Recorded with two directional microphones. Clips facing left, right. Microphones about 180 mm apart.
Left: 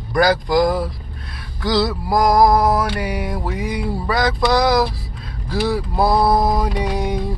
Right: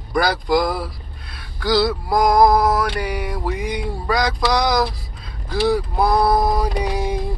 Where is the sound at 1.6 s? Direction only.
Centre (ahead or behind).